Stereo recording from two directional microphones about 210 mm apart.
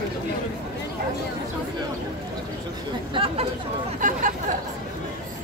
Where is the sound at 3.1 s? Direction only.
25° right (ahead or behind).